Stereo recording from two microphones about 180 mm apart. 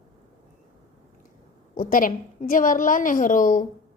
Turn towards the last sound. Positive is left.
turn(degrees=45)  # may be behind; listen again after turning